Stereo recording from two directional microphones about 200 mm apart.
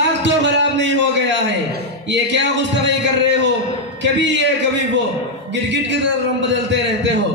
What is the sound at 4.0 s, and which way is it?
A man's voice, 65° right (ahead or behind).